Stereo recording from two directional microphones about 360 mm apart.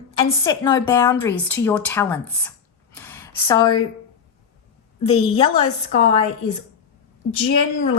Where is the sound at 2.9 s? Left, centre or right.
Centre.